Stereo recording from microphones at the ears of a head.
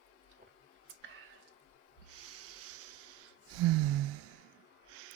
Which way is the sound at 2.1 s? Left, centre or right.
Right.